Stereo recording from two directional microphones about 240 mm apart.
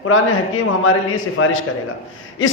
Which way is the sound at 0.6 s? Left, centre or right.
Left.